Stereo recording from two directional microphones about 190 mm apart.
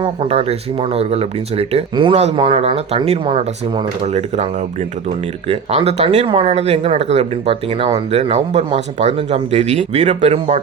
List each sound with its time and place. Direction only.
0.0 s speech: 30° right (ahead or behind)